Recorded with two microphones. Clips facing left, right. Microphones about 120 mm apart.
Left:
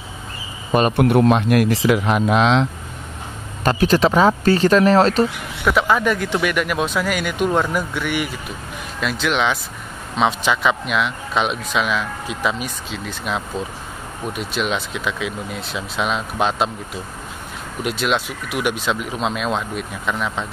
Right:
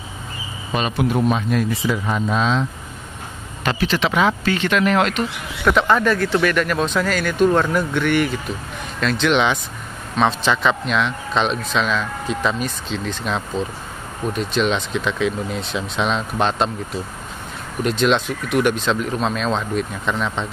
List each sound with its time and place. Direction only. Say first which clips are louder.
0.7 s speech: left 5 dB; 55° left (ahead or behind); by 2.7 s 75° left (ahead or behind)
3.6 s speech: left 5 dB; 45° left (ahead or behind)
5.7 s speech: right 1 dB; 5° left (ahead or behind)